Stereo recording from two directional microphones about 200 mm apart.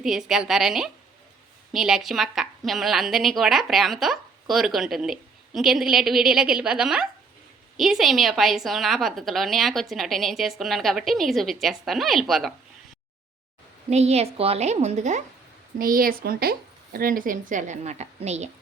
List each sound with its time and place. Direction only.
0.0 s a woman's voice: centre (ahead or behind)
13.9 s a woman's voice: 30° right (ahead or behind)